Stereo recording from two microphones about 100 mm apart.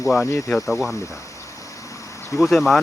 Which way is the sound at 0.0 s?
Centre (ahead or behind).